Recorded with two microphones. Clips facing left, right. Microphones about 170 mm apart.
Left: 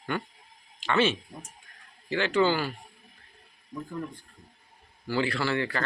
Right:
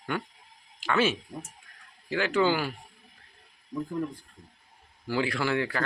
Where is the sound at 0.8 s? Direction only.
5° right (ahead or behind).